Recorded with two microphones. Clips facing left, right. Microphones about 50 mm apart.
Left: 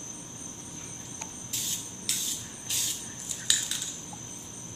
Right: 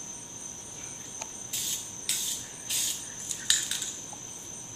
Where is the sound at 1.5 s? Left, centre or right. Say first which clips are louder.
Left 1 dB; centre.